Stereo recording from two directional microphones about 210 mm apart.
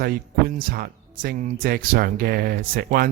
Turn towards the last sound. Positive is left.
turn(degrees=-45)  # may be behind; listen again after turning